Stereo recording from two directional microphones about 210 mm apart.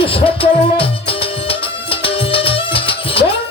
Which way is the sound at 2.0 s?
25° left (ahead or behind).